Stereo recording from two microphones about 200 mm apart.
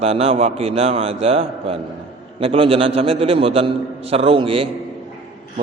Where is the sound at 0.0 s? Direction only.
30° right (ahead or behind).